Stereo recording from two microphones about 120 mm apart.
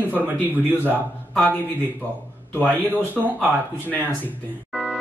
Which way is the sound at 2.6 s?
15° left (ahead or behind).